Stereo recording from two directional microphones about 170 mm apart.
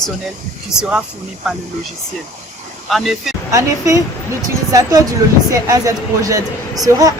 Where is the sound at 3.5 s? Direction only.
20° right (ahead or behind).